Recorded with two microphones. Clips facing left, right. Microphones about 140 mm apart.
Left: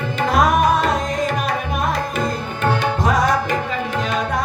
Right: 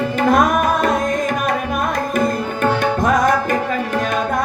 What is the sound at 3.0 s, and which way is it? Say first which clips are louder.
Music: right 3 dB; 50° right (ahead or behind).